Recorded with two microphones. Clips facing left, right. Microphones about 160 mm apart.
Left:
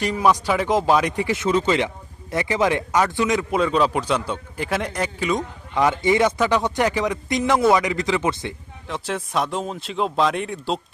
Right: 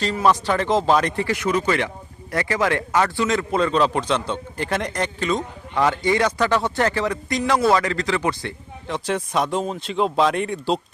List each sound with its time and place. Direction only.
0.0 s speech: 15° left (ahead or behind)
5.7 s speech: 20° left (ahead or behind)
8.9 s speech: centre (ahead or behind)